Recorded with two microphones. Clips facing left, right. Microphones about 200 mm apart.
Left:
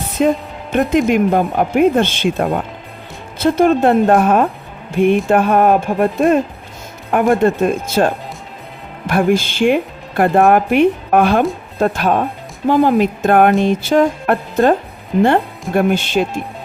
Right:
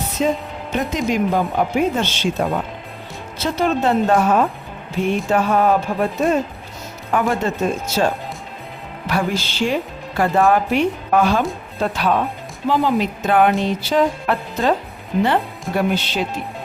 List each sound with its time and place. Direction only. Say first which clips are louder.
0.2 s speech: left 5 dB; 55° left (ahead or behind)
3.3 s music: left 7 dB; 50° left (ahead or behind)
4.9 s speech: left 6 dB; 55° left (ahead or behind)
7.1 s music: left 7 dB; 55° left (ahead or behind)
9.0 s speech: left 7 dB; 50° left (ahead or behind)
11.8 s music: left 4 dB; 45° left (ahead or behind)
15.1 s speech: left 5 dB; centre (ahead or behind)
15.7 s music: left 5 dB; 50° left (ahead or behind)